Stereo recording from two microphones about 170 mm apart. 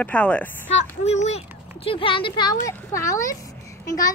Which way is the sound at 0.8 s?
40° left (ahead or behind).